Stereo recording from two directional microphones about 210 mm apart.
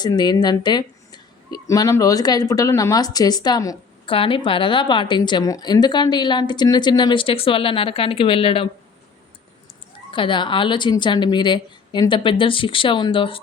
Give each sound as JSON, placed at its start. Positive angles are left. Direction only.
{"t": 0.0, "sound": "speech", "side_deg": 20}
{"t": 10.1, "sound": "speech", "side_deg": 25}